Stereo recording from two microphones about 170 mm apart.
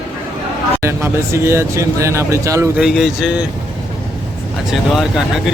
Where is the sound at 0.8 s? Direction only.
15° right (ahead or behind).